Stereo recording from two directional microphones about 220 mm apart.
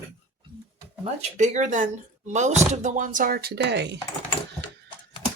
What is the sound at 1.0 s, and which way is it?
Speech, 30° right (ahead or behind).